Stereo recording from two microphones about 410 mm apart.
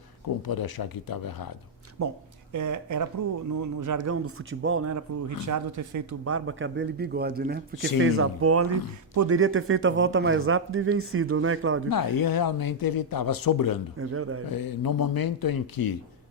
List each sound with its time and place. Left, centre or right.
0.4 s speech: left
2.0 s speech: right
11.9 s speech: left
14.0 s speech: right
14.5 s speech: left